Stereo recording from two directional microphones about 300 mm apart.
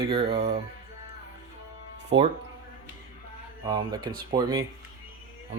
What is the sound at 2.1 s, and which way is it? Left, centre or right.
Speech, centre.